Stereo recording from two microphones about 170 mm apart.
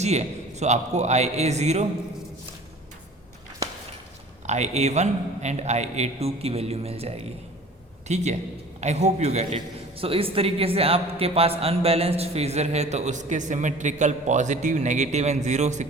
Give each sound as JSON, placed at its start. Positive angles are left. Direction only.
{"t": 0.0, "sound": "a man's voice", "side_deg": -40}
{"t": 4.4, "sound": "a man's voice", "side_deg": -40}